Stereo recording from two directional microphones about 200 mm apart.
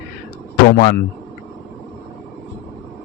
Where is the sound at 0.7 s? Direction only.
50° left (ahead or behind).